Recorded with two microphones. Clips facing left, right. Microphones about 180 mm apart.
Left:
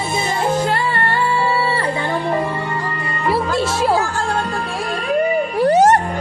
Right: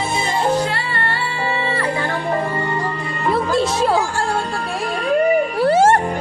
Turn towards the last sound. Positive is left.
turn(degrees=15)  # may be behind; listen again after turning